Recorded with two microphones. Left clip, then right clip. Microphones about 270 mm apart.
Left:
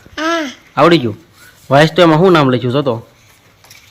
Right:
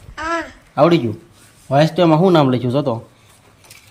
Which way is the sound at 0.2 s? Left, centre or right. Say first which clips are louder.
Left 5 dB; left.